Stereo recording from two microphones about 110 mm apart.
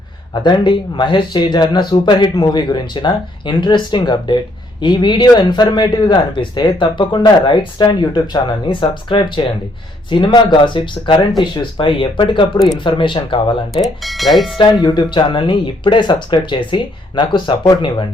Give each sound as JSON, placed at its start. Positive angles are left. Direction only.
{"t": 0.4, "sound": "speech", "side_deg": 45}
{"t": 13.8, "sound": "speech", "side_deg": 0}
{"t": 14.6, "sound": "speech", "side_deg": 40}